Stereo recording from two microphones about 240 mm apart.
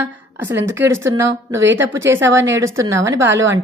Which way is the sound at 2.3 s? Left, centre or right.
Right.